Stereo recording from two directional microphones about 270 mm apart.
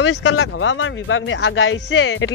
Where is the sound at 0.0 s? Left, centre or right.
Left.